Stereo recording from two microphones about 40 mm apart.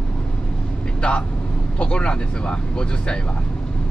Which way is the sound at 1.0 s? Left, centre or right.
Left.